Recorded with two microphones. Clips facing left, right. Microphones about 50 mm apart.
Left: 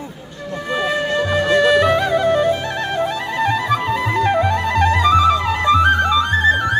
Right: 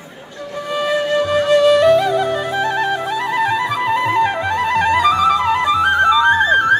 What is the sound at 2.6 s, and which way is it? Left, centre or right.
Music, centre.